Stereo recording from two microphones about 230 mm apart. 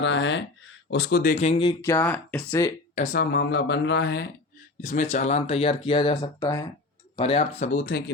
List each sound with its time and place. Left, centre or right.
0.0 s speech: left
1.9 s speech: centre
2.9 s speech: left
4.8 s speech: left